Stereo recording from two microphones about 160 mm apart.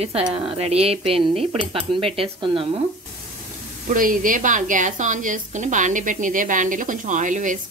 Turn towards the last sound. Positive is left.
turn(degrees=-50)  # may be behind; listen again after turning